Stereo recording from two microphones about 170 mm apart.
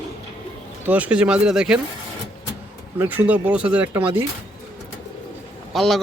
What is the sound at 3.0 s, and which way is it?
Speech, 10° right (ahead or behind).